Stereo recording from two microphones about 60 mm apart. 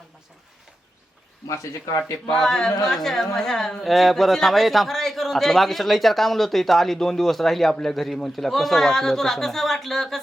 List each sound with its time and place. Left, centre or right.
1.5 s speech: left
2.3 s a woman's voice: centre